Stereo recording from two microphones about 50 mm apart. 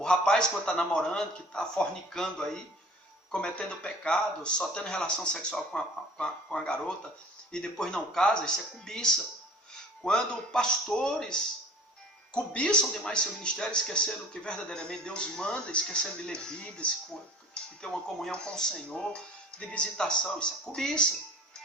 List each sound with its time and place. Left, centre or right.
0.0 s speech: centre